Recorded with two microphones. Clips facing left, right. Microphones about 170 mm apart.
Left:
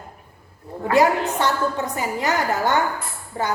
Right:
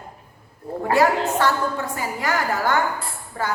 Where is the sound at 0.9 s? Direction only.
20° left (ahead or behind).